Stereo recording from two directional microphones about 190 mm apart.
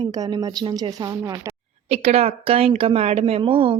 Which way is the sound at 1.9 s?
35° right (ahead or behind).